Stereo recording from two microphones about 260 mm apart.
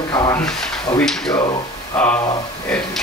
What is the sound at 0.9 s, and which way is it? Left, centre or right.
Speech, centre.